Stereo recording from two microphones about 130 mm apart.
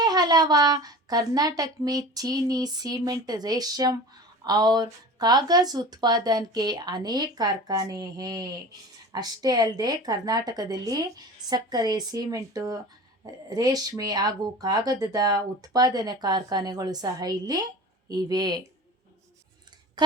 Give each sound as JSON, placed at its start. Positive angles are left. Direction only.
{"t": 0.0, "sound": "a woman's voice", "side_deg": -30}